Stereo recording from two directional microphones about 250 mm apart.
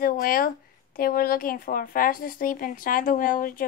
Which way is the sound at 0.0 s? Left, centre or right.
Left.